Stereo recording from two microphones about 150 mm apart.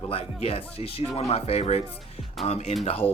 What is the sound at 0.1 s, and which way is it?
Speech, 40° left (ahead or behind).